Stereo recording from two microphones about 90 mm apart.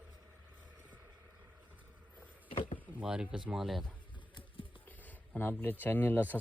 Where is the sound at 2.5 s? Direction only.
70° left (ahead or behind).